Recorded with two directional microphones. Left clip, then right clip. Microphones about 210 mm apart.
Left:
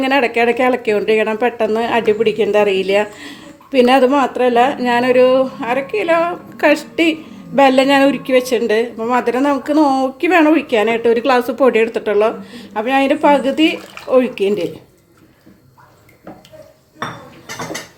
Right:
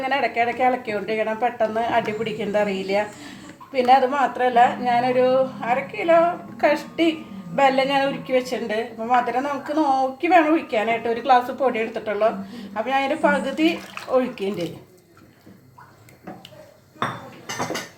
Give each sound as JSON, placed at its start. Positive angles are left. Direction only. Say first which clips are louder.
{"t": 0.0, "sound": "speech", "louder": "left 7 dB", "side_deg": 50}